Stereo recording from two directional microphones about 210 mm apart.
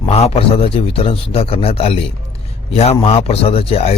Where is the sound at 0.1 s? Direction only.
30° left (ahead or behind).